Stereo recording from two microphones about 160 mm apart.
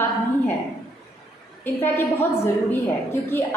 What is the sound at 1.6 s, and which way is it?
A woman's voice, 15° left (ahead or behind).